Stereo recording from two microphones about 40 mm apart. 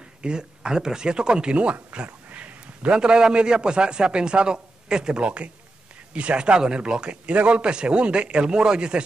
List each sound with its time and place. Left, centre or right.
0.2 s a man's voice: right
2.3 s a sound: right
3.0 s a man's voice: centre